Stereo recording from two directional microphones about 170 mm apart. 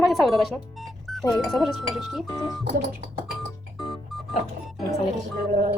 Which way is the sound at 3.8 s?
Centre (ahead or behind).